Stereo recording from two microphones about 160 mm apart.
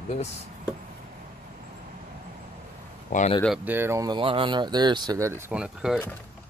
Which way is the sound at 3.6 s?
15° right (ahead or behind).